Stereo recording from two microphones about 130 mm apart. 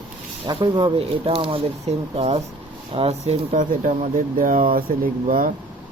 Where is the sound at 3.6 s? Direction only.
90° right.